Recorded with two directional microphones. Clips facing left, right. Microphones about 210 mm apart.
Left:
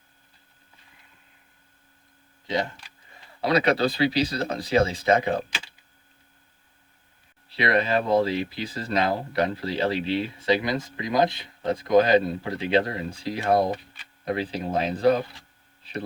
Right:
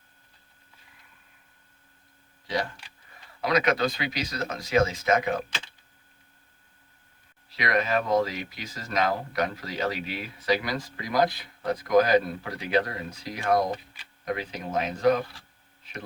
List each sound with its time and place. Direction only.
2.5 s speech: 25° left (ahead or behind)
7.5 s speech: 30° left (ahead or behind)
15.8 s a sound: 35° left (ahead or behind)